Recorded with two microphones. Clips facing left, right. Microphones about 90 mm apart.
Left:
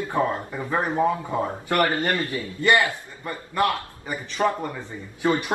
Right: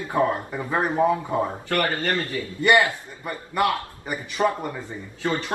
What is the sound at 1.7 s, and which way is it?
Speech, 25° left (ahead or behind).